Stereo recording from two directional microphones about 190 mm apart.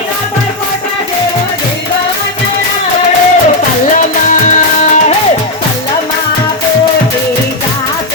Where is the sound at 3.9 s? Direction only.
45° left (ahead or behind).